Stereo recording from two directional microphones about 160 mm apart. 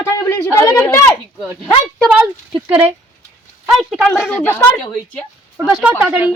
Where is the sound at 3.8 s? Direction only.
5° right (ahead or behind).